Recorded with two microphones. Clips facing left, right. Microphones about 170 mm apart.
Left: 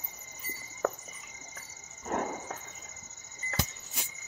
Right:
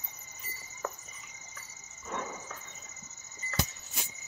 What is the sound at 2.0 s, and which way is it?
Cricket, 70° left (ahead or behind).